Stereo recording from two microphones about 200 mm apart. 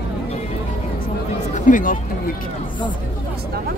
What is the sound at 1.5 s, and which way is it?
Speech, 40° left (ahead or behind).